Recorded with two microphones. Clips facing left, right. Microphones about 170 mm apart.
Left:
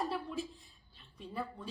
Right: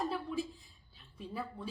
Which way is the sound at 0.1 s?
Centre (ahead or behind).